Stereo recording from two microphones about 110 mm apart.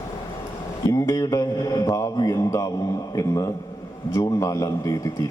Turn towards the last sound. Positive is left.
turn(degrees=30)  # may be behind; listen again after turning